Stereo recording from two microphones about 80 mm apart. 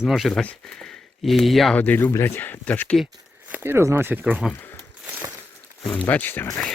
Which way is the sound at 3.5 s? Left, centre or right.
Right.